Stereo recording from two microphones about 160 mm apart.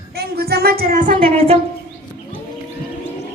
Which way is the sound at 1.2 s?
35° right (ahead or behind).